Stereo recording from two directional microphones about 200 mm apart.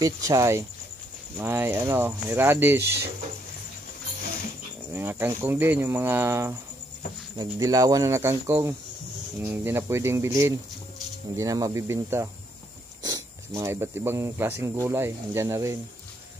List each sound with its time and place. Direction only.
0.0 s speech: 15° right (ahead or behind)
4.9 s speech: 10° right (ahead or behind)